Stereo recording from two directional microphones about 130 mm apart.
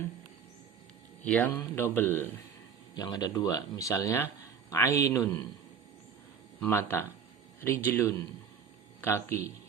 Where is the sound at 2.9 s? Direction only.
30° left (ahead or behind).